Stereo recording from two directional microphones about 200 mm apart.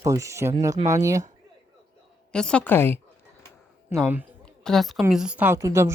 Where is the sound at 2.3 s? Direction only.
5° left (ahead or behind).